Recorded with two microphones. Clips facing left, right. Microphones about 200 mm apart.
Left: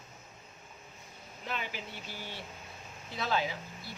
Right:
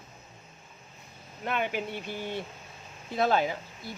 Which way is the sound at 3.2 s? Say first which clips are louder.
Right 7 dB; 50° right (ahead or behind).